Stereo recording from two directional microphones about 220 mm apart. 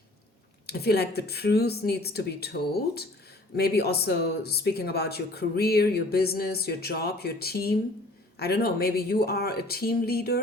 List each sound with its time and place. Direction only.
0.7 s speech: 45° left (ahead or behind)